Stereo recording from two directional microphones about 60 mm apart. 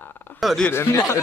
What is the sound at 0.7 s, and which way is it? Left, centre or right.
Speech, left.